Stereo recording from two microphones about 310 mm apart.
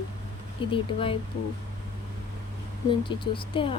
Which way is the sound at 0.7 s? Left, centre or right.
Centre.